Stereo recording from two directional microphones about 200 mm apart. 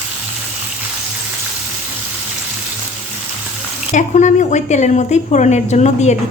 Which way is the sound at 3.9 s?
35° left (ahead or behind).